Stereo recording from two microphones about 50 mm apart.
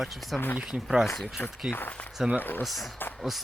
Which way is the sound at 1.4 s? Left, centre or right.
Left.